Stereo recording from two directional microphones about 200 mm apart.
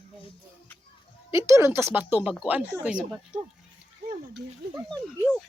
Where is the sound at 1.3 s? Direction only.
15° right (ahead or behind).